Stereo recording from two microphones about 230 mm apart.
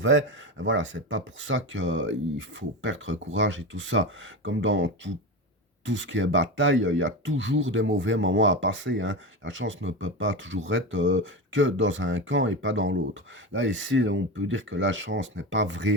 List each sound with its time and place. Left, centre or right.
0.0 s speech: right